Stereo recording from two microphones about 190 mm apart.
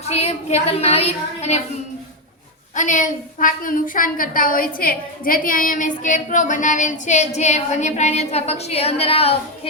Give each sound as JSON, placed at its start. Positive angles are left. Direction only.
{"t": 0.0, "sound": "a woman's voice", "side_deg": 35}
{"t": 2.7, "sound": "a woman's voice", "side_deg": 40}